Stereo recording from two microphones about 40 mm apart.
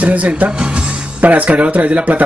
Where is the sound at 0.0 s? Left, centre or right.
Right.